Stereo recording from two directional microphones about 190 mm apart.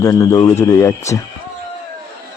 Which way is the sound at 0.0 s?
20° left (ahead or behind).